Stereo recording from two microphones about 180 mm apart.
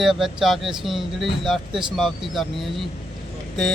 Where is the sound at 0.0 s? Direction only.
Centre (ahead or behind).